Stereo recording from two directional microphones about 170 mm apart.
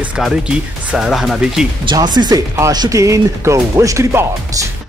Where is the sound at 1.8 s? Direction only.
25° right (ahead or behind).